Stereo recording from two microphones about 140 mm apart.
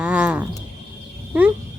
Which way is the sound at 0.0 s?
10° right (ahead or behind).